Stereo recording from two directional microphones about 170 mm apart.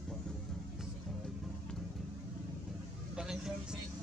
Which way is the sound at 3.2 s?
5° right (ahead or behind).